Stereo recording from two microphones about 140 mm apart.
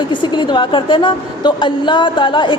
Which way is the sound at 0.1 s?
35° left (ahead or behind).